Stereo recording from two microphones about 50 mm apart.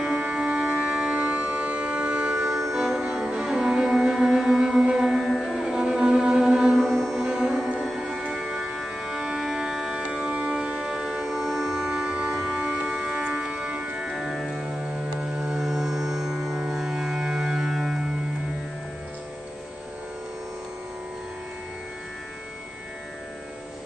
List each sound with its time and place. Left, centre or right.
0.1 s music: right; by 5.7 s centre
5.7 s music: centre
6.7 s music: centre
7.2 s music: centre
8.7 s organ: centre
11.8 s music: centre